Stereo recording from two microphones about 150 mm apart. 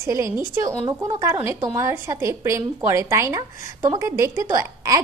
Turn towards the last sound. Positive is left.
turn(degrees=-20)  # may be behind; listen again after turning